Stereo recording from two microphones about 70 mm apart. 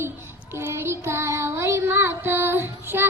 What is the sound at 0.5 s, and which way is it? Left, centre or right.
Child singing, right.